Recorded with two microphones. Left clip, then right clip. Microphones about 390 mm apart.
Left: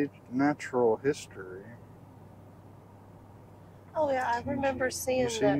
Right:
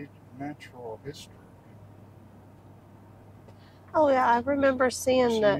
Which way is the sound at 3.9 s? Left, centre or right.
Right.